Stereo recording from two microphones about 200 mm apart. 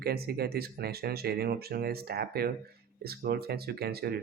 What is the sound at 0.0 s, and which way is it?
Speech, 50° right (ahead or behind).